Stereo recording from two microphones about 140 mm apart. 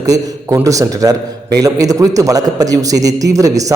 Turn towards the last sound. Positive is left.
turn(degrees=-25)  # may be behind; listen again after turning